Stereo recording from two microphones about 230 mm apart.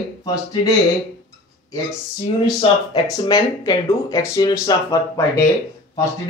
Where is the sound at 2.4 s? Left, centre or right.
Centre.